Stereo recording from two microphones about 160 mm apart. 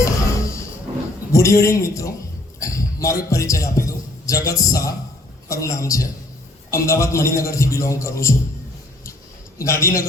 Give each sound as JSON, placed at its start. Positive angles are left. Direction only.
{"t": 0.0, "sound": "music", "side_deg": 20}
{"t": 1.3, "sound": "a man's voice", "side_deg": 20}
{"t": 2.6, "sound": "a sound", "side_deg": 20}
{"t": 3.2, "sound": "a man's voice", "side_deg": 20}
{"t": 9.6, "sound": "a man's voice", "side_deg": 20}